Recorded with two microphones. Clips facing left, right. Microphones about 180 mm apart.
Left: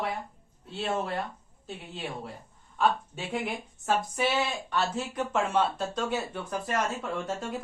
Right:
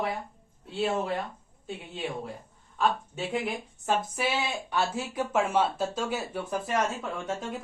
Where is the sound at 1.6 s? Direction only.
Centre (ahead or behind).